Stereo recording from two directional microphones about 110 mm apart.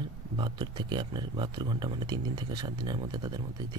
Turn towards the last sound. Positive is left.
turn(degrees=-40)  # may be behind; listen again after turning